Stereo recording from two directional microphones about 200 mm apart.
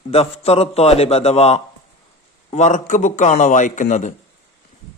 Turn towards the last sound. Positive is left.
turn(degrees=40)  # may be behind; listen again after turning